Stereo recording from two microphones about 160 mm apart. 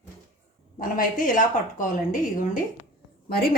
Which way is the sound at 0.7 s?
55° left (ahead or behind).